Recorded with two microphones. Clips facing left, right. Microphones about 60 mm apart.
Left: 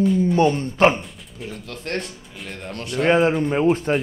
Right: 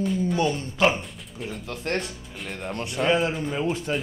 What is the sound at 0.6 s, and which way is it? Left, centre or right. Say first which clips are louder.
Speech: left 5 dB; left.